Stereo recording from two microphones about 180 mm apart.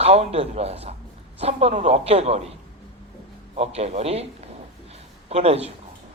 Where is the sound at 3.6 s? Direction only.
35° right (ahead or behind).